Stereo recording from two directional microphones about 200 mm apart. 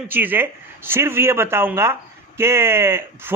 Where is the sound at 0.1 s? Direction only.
10° right (ahead or behind).